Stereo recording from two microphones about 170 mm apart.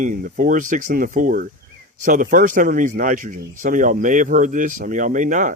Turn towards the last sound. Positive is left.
turn(degrees=-50)  # may be behind; listen again after turning